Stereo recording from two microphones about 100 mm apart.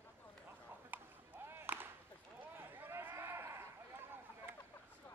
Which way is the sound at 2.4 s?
20° right (ahead or behind).